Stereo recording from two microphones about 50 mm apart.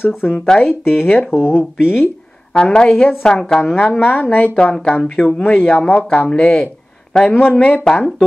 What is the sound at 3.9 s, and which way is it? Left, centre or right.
Speech, left.